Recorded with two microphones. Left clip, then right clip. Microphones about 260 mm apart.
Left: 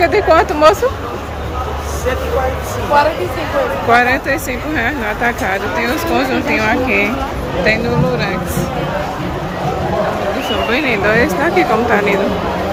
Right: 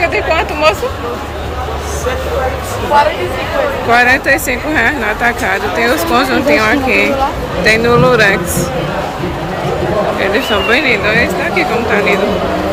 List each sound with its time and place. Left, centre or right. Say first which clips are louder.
0.0 s a woman's voice: left 2 dB; centre
3.8 s speech: right 4 dB; centre
10.7 s speech: right 2 dB; centre